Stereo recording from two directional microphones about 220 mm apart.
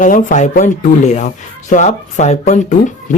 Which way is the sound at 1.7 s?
35° left (ahead or behind).